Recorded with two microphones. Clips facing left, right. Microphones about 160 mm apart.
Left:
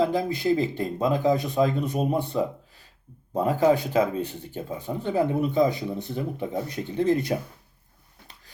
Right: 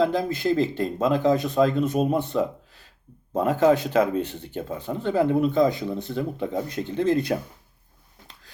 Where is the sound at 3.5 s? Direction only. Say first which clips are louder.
Right 2 dB; 10° left (ahead or behind).